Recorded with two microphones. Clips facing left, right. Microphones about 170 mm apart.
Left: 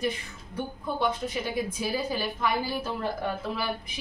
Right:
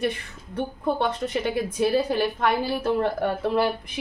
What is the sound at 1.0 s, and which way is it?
A woman's voice, 80° right.